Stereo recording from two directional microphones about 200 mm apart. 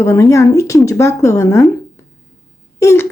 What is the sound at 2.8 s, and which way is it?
Speech, 15° left (ahead or behind).